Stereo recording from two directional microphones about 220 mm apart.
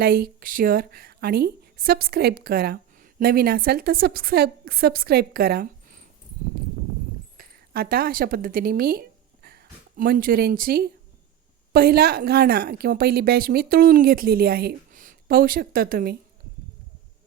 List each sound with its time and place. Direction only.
0.0 s a woman's voice: 45° right (ahead or behind)
7.3 s a sound: 45° right (ahead or behind)
10.0 s a woman's voice: 40° right (ahead or behind)